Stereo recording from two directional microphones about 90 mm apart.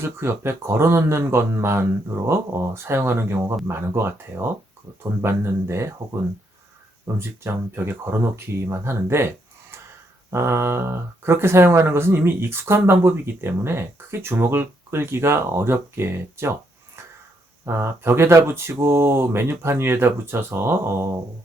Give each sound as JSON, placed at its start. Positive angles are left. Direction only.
{"t": 0.0, "sound": "speech", "side_deg": -25}
{"t": 7.2, "sound": "speech", "side_deg": -25}
{"t": 10.3, "sound": "speech", "side_deg": -30}